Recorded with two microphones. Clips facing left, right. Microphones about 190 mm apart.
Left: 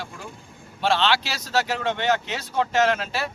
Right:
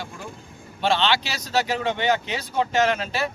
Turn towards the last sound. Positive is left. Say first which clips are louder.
# even
turn(degrees=5)  # may be behind; listen again after turning